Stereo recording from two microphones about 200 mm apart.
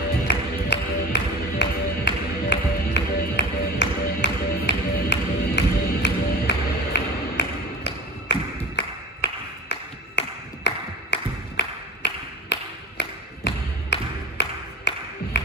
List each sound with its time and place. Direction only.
0.3 s music: 60° left (ahead or behind)